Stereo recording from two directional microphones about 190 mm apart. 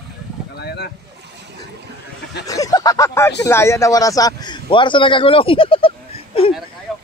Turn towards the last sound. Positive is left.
turn(degrees=30)  # may be behind; listen again after turning